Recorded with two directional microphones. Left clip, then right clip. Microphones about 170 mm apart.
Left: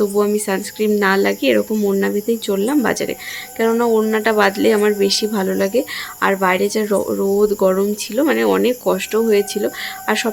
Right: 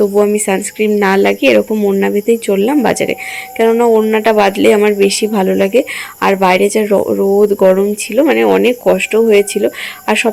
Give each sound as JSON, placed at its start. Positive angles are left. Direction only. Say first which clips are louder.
{"t": 0.0, "sound": "speech", "louder": "right 6 dB", "side_deg": -15}